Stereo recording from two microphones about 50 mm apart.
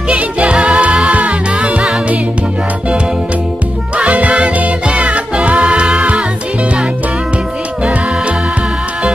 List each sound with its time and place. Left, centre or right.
0.1 s music: right
3.9 s music: right